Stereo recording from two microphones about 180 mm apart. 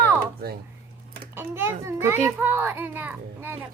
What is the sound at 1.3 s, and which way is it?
A child's voice, 15° right (ahead or behind).